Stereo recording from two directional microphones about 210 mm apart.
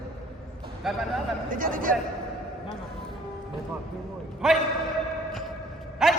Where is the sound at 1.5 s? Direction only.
40° right (ahead or behind).